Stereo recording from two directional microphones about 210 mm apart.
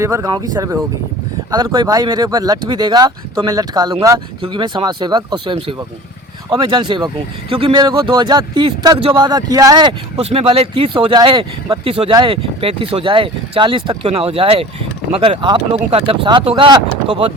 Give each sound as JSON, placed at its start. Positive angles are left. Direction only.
{"t": 0.0, "sound": "speech", "side_deg": -15}